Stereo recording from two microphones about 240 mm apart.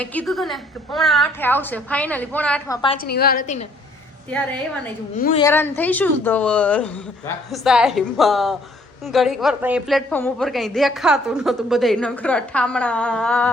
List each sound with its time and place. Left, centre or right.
0.0 s a woman's voice: centre
2.9 s a woman's voice: left
5.3 s a woman's voice: centre